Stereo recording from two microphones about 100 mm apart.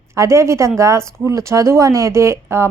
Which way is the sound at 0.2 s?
30° right (ahead or behind).